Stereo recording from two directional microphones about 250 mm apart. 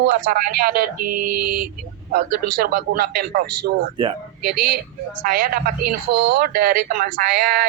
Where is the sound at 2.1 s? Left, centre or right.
Right.